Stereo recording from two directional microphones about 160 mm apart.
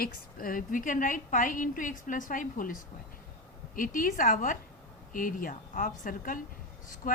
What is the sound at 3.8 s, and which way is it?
A woman's voice, 60° left (ahead or behind).